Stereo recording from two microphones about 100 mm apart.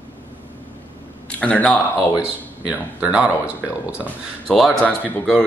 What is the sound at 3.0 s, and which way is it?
Speech, 10° right (ahead or behind).